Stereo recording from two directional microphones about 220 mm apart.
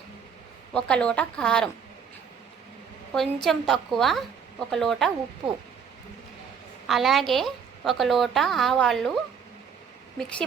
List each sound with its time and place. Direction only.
0.7 s a woman's voice: 5° left (ahead or behind)
3.1 s a woman's voice: centre (ahead or behind)
6.8 s a woman's voice: centre (ahead or behind)